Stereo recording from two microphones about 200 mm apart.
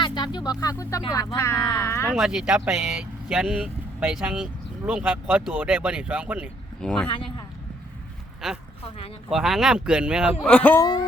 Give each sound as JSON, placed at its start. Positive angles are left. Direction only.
{"t": 0.0, "sound": "a sound", "side_deg": 25}
{"t": 0.6, "sound": "speech", "side_deg": 15}
{"t": 2.1, "sound": "speech", "side_deg": 0}
{"t": 6.8, "sound": "speech", "side_deg": 5}
{"t": 7.1, "sound": "a man's voice", "side_deg": 25}
{"t": 9.3, "sound": "speech", "side_deg": 0}
{"t": 10.5, "sound": "speech", "side_deg": 5}